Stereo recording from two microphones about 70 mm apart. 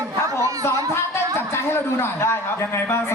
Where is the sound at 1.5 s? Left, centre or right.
Left.